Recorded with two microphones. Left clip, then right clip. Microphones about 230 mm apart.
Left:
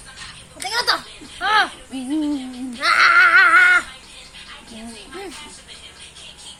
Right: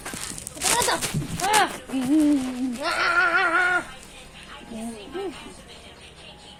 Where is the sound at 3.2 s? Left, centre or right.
Left.